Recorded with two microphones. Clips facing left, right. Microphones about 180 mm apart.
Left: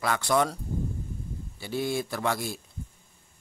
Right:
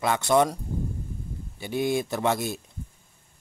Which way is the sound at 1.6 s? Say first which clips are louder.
Right 4 dB; 15° right (ahead or behind).